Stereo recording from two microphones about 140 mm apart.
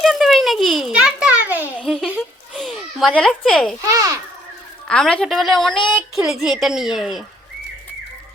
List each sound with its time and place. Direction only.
0.0 s a child's voice: centre (ahead or behind)
2.1 s a sound: centre (ahead or behind)
3.2 s a woman's voice: 5° left (ahead or behind)
3.8 s a child's voice: 20° right (ahead or behind)
4.9 s a woman's voice: 5° left (ahead or behind)